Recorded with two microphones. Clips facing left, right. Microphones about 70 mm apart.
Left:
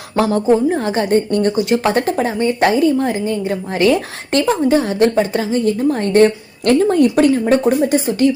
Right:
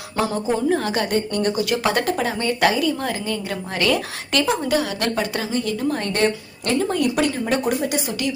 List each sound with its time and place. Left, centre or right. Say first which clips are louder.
0.3 s a woman's voice: left 7 dB; left